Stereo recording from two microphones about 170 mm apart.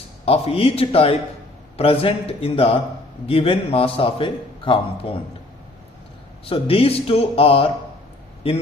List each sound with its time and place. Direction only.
0.3 s a man's voice: 35° left (ahead or behind)
6.4 s a man's voice: 35° left (ahead or behind)